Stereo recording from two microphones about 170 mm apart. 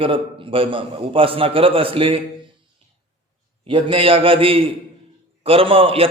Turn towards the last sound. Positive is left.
turn(degrees=-35)  # may be behind; listen again after turning